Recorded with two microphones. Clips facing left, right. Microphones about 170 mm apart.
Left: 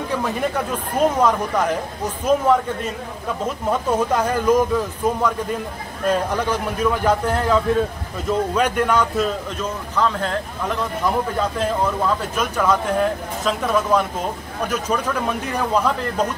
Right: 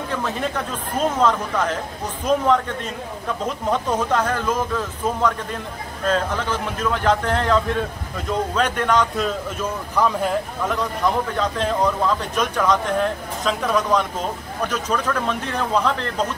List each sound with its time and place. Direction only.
0.1 s speech: 10° left (ahead or behind)
9.6 s a man's voice: 10° right (ahead or behind)
10.7 s speech: 5° left (ahead or behind)